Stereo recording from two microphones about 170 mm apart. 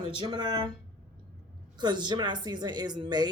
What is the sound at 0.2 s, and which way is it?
Speech, 25° right (ahead or behind).